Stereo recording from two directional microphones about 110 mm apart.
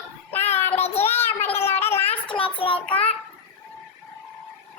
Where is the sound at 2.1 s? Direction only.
55° left (ahead or behind).